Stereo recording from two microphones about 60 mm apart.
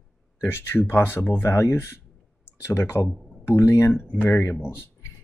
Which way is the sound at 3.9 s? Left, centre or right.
Left.